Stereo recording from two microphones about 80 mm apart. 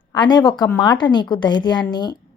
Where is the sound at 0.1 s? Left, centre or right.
Left.